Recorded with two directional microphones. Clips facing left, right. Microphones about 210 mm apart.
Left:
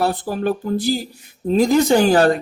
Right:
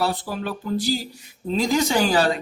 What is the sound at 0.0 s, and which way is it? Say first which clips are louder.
Speech: left 5 dB; 50° left (ahead or behind).